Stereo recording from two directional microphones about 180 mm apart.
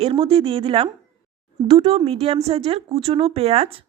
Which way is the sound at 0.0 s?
30° right (ahead or behind).